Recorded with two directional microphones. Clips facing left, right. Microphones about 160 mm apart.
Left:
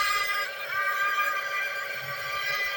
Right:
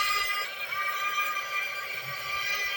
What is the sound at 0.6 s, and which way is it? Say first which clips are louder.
Neigh: left 4 dB; 15° right (ahead or behind).